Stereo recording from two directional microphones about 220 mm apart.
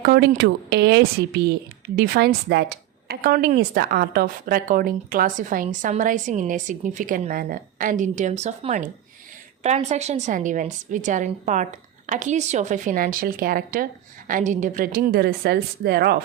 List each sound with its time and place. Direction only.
0.0 s a woman's voice: 40° right (ahead or behind)